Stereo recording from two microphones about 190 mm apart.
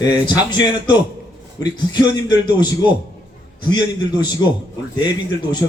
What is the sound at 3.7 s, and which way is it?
Speech, 20° left (ahead or behind).